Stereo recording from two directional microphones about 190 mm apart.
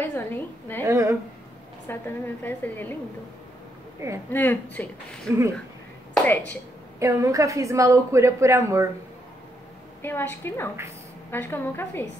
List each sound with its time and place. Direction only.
0.0 s a woman's voice: 10° left (ahead or behind)
0.8 s a woman's voice: 15° right (ahead or behind)
1.9 s a woman's voice: 10° left (ahead or behind)
4.3 s a woman's voice: 10° left (ahead or behind)
7.0 s a woman's voice: 15° right (ahead or behind)
10.0 s a woman's voice: 10° left (ahead or behind)